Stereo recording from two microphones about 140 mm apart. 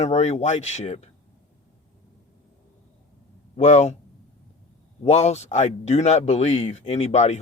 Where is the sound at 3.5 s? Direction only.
55° left (ahead or behind).